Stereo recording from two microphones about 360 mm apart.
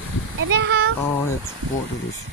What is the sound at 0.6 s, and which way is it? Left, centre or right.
Speech, right.